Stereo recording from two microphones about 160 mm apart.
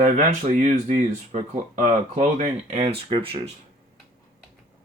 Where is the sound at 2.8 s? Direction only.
35° right (ahead or behind).